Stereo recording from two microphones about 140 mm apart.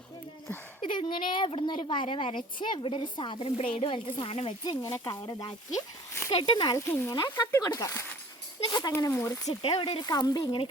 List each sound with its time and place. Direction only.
0.8 s a woman's voice: 35° left (ahead or behind)
4.8 s speech: 20° left (ahead or behind)
9.6 s speech: 35° left (ahead or behind)